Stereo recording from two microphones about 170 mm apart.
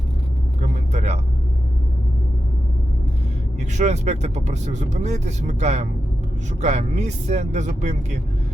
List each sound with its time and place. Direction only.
0.6 s vehicle: 40° right (ahead or behind)
3.6 s speech: 45° right (ahead or behind)